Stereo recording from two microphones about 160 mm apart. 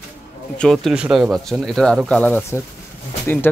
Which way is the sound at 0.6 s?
5° left (ahead or behind).